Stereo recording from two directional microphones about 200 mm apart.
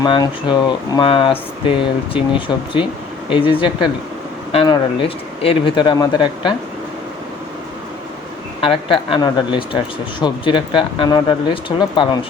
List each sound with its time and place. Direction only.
0.0 s speech: 20° left (ahead or behind)
8.6 s speech: 25° left (ahead or behind)